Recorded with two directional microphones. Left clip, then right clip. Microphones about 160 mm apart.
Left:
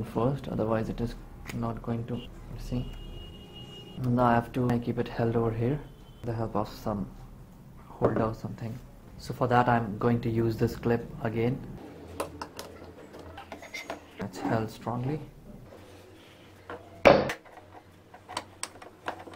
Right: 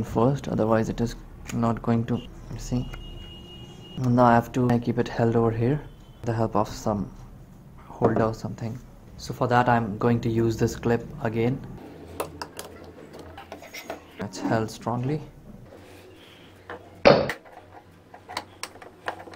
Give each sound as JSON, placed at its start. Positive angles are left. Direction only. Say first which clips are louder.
{"t": 0.0, "sound": "speech", "louder": "right 6 dB", "side_deg": -20}
{"t": 4.0, "sound": "speech", "louder": "right 6 dB", "side_deg": -20}
{"t": 8.0, "sound": "speech", "louder": "right 5 dB", "side_deg": -15}
{"t": 9.2, "sound": "speech", "louder": "right 3 dB", "side_deg": -5}
{"t": 12.2, "sound": "dishes", "louder": "right 3 dB", "side_deg": -10}
{"t": 13.4, "sound": "rub", "louder": "even", "side_deg": -5}
{"t": 16.6, "sound": "a sound", "louder": "right 2 dB", "side_deg": 0}